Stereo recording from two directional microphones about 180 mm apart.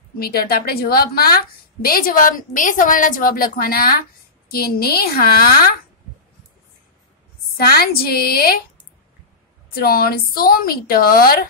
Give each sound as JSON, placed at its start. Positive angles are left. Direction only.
{"t": 0.2, "sound": "a woman's voice", "side_deg": 60}
{"t": 7.5, "sound": "a woman's voice", "side_deg": 55}
{"t": 9.8, "sound": "a woman's voice", "side_deg": 55}